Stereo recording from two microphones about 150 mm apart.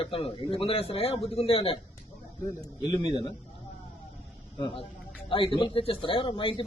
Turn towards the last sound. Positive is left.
turn(degrees=35)  # may be behind; listen again after turning